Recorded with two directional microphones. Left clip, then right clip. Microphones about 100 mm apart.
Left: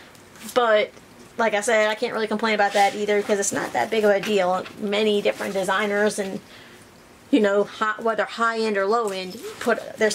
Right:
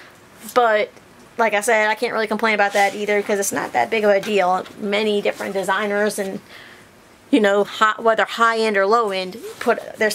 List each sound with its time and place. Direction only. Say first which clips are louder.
0.5 s a woman's voice: right 2 dB; 30° right (ahead or behind)
7.2 s speech: right 3 dB; 40° right (ahead or behind)